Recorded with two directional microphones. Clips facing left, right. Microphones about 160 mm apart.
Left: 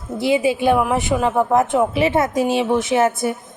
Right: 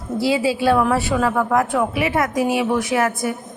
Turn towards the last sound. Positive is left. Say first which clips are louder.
# left 3 dB
turn(degrees=25)  # may be behind; listen again after turning